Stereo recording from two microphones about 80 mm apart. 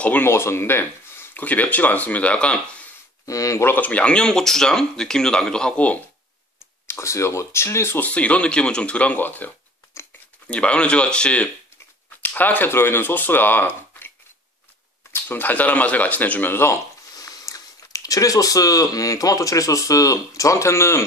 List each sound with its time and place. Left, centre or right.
0.0 s speech: left
0.3 s speech: left; by 2.6 s centre
3.3 s speech: left
3.6 s speech: left
6.9 s speech: left
8.1 s speech: centre
9.9 s a sound: left
10.5 s speech: centre
15.1 s speech: left
17.2 s speech: left